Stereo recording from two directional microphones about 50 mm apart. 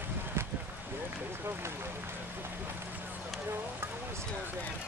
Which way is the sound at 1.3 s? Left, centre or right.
Right.